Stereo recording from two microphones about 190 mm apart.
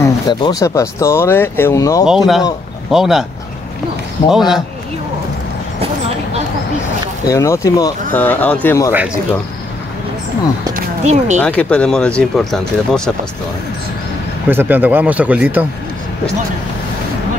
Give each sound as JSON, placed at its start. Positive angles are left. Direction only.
{"t": 0.0, "sound": "speech", "side_deg": 20}
{"t": 2.0, "sound": "speech", "side_deg": 0}
{"t": 4.3, "sound": "speech", "side_deg": 0}
{"t": 7.2, "sound": "speech", "side_deg": 15}
{"t": 10.7, "sound": "a sound", "side_deg": -40}
{"t": 11.4, "sound": "speech", "side_deg": 5}
{"t": 14.5, "sound": "speech", "side_deg": -10}